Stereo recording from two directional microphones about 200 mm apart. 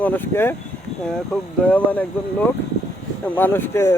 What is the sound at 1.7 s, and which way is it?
Speech, 10° left (ahead or behind).